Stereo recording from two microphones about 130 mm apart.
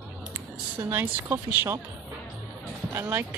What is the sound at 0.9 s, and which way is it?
Speech, 15° right (ahead or behind).